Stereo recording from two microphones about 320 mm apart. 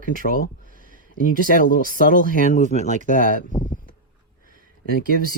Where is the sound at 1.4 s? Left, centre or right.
Left.